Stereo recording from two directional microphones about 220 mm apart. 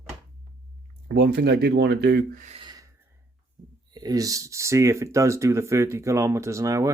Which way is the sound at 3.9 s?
15° right (ahead or behind).